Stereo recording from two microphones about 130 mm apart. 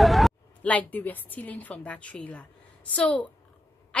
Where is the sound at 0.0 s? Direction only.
Centre (ahead or behind).